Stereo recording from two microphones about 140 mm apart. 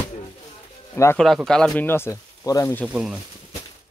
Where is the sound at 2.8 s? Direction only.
5° right (ahead or behind).